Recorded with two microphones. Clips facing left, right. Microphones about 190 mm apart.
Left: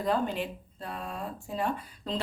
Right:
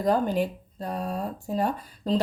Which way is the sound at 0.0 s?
40° right (ahead or behind).